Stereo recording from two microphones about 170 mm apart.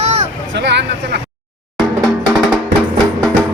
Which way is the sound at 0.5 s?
90° right.